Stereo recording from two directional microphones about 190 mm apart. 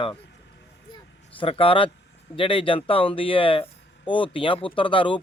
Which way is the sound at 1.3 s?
30° left (ahead or behind).